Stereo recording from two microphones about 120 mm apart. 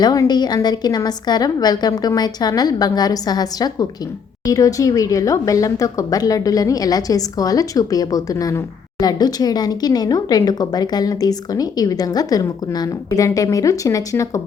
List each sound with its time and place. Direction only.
0.0 s speech: 35° left (ahead or behind)